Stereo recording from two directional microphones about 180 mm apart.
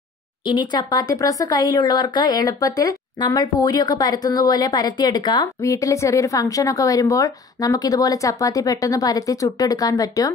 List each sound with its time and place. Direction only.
0.5 s speech: 25° left (ahead or behind)